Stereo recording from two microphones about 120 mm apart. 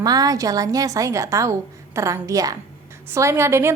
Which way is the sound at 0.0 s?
30° right (ahead or behind).